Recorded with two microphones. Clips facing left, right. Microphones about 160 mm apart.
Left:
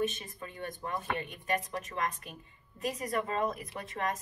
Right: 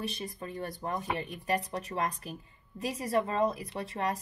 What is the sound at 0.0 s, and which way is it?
A woman's voice, 35° right (ahead or behind).